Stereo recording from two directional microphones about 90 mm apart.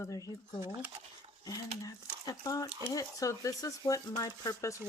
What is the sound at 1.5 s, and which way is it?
Speech, 40° left (ahead or behind).